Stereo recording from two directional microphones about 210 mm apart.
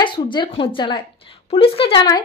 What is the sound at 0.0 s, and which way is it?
Speech, 20° left (ahead or behind).